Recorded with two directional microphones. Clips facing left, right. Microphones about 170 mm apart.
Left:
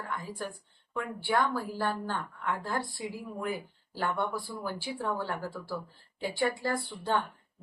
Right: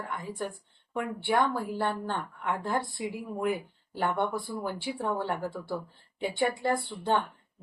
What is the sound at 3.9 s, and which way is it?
A woman's voice, 20° right (ahead or behind).